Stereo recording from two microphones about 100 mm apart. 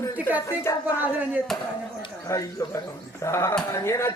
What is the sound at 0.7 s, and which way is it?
Speech, 25° left (ahead or behind).